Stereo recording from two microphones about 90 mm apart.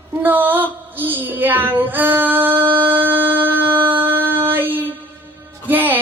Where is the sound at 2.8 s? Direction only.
20° right (ahead or behind).